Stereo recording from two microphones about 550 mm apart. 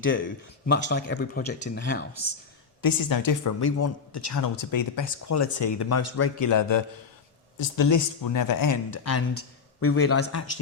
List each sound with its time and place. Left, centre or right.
0.0 s a man's voice: left
2.8 s a man's voice: left